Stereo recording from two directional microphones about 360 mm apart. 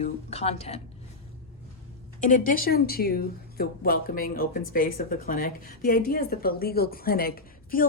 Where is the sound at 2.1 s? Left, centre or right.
Left.